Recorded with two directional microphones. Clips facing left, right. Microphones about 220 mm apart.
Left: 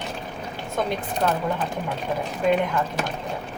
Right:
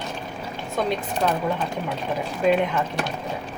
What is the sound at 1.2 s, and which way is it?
Speech, 5° right (ahead or behind).